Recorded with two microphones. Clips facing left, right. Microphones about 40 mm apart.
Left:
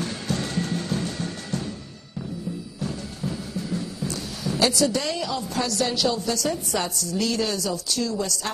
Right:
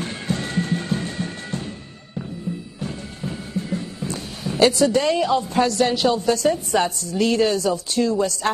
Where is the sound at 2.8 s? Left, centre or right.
Right.